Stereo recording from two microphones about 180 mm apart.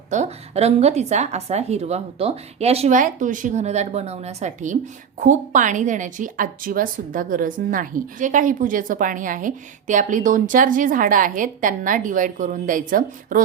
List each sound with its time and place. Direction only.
0.1 s a woman's voice: 40° right (ahead or behind)